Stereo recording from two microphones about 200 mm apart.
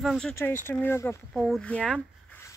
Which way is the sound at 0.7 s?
10° left (ahead or behind).